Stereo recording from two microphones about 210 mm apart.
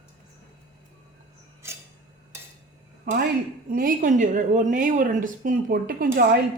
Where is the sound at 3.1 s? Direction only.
40° right (ahead or behind).